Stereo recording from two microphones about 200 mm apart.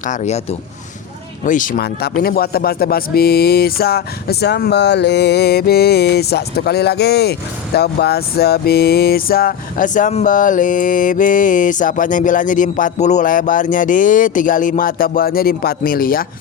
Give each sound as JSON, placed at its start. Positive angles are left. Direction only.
{"t": 0.0, "sound": "speech", "side_deg": 40}
{"t": 1.5, "sound": "speech", "side_deg": 40}